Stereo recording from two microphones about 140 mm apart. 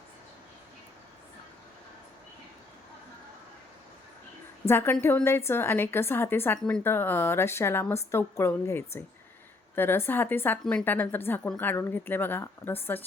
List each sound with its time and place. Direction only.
4.6 s a woman's voice: 15° left (ahead or behind)